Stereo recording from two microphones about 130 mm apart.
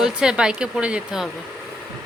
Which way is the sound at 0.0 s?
5° right (ahead or behind).